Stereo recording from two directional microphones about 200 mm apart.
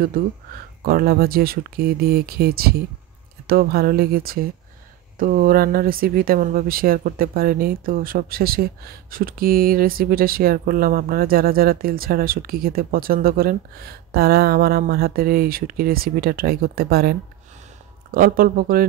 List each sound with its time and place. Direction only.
0.8 s speech: 50° right (ahead or behind)